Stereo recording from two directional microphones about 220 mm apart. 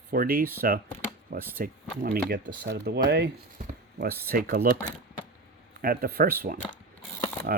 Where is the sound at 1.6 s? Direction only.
40° right (ahead or behind).